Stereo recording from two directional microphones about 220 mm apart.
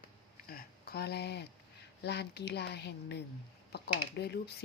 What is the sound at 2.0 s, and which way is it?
Speech, 50° left (ahead or behind).